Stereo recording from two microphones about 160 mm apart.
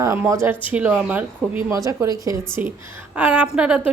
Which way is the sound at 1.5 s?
20° right (ahead or behind).